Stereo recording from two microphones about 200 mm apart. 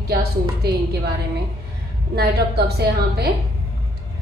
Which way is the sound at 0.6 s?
50° right (ahead or behind).